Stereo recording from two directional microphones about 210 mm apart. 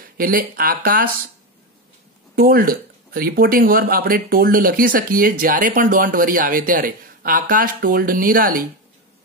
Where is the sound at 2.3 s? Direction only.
45° right (ahead or behind).